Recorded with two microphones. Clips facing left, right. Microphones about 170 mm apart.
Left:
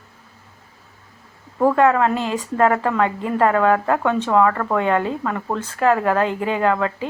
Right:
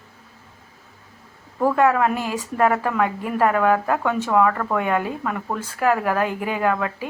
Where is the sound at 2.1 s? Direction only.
25° left (ahead or behind).